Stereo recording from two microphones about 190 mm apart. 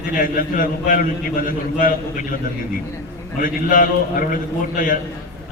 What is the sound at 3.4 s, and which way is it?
Speech, 45° left (ahead or behind).